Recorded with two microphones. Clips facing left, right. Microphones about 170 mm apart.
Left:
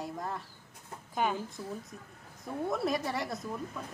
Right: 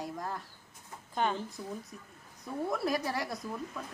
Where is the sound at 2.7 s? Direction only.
Centre (ahead or behind).